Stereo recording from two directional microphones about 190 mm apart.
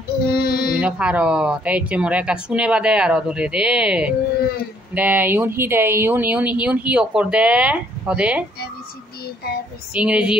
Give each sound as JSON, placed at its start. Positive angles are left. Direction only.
{"t": 0.3, "sound": "female singing", "side_deg": 55}
{"t": 0.7, "sound": "speech", "side_deg": -5}
{"t": 9.9, "sound": "speech", "side_deg": -5}